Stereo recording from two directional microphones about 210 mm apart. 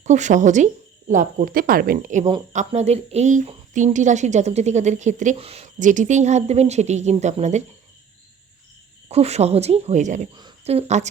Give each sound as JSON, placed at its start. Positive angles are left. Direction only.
{"t": 0.0, "sound": "speech", "side_deg": -35}
{"t": 9.0, "sound": "speech", "side_deg": -30}
{"t": 10.3, "sound": "speech", "side_deg": -25}